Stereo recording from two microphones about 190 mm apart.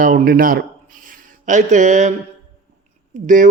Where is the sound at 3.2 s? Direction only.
40° right (ahead or behind).